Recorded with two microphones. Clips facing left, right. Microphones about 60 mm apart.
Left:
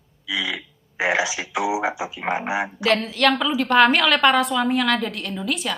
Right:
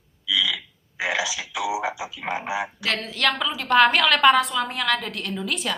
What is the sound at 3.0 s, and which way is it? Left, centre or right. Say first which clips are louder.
A woman's voice: left 4 dB; centre.